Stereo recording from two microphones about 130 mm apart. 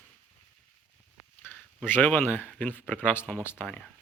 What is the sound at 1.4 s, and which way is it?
Speech, 15° left (ahead or behind).